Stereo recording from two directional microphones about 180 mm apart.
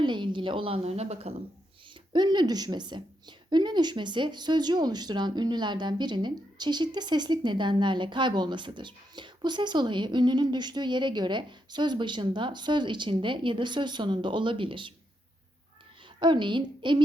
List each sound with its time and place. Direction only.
0.0 s a woman's voice: 25° right (ahead or behind)
1.9 s a woman's voice: 25° right (ahead or behind)
16.2 s a woman's voice: 25° right (ahead or behind)